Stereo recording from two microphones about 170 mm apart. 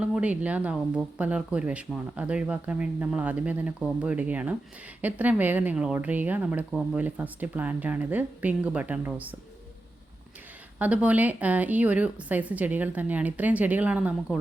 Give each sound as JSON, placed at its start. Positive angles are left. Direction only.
{"t": 0.0, "sound": "speech", "side_deg": -5}
{"t": 10.8, "sound": "speech", "side_deg": -10}